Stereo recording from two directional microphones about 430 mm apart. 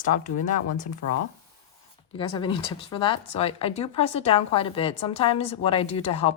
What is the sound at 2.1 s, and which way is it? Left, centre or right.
Speech, centre.